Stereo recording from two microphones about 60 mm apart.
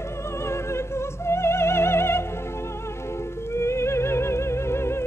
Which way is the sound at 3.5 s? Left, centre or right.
Left.